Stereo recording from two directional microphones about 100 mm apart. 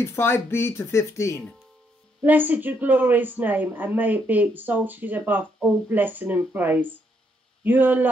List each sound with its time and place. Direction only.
0.0 s speech: 25° left (ahead or behind)
2.2 s speech: 15° right (ahead or behind)